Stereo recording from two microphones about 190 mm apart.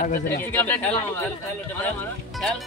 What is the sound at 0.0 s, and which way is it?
Speech, 45° left (ahead or behind).